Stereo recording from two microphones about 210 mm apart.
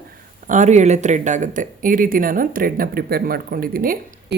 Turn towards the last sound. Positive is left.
turn(degrees=-45)  # may be behind; listen again after turning